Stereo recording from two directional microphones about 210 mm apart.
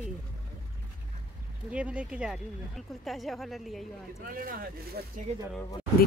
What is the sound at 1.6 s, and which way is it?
Speech, 5° right (ahead or behind).